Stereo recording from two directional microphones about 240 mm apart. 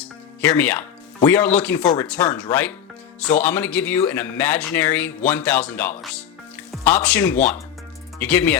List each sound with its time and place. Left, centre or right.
0.0 s speech: centre
1.8 s speech: centre
2.0 s speech: centre